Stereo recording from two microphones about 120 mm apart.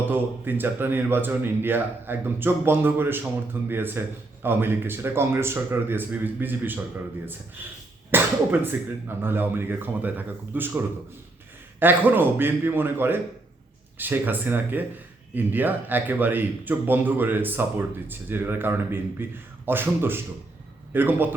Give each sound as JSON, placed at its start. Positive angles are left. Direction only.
{"t": 0.0, "sound": "speech", "side_deg": -15}
{"t": 8.1, "sound": "speech", "side_deg": -15}
{"t": 11.8, "sound": "a man's voice", "side_deg": -15}